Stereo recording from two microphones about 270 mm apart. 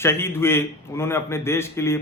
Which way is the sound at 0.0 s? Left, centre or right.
Centre.